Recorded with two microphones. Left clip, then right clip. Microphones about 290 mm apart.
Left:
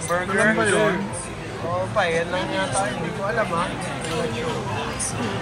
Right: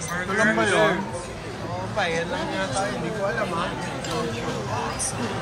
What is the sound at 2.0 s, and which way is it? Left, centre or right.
Speech, centre.